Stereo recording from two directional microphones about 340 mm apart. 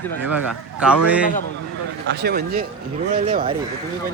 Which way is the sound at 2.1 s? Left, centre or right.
Right.